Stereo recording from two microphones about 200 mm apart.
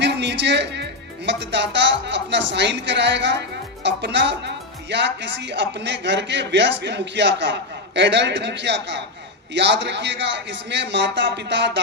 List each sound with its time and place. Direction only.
0.0 s speech: 60° right (ahead or behind)